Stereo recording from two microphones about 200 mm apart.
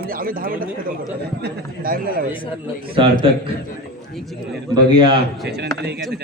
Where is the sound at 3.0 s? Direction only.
25° right (ahead or behind).